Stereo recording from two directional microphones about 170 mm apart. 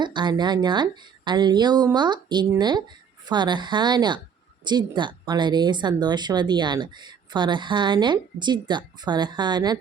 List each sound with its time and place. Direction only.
0.0 s a woman's voice: 25° right (ahead or behind)